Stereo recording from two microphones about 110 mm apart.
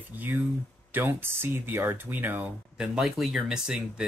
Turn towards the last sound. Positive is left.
turn(degrees=-5)  # may be behind; listen again after turning